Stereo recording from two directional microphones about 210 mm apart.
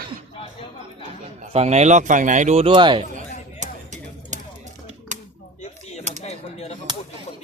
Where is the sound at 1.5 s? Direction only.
30° right (ahead or behind).